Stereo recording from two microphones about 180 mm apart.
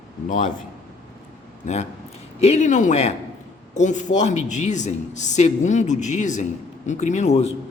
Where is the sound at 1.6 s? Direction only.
40° left (ahead or behind).